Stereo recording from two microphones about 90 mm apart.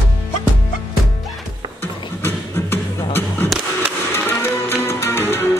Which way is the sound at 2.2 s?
25° left (ahead or behind).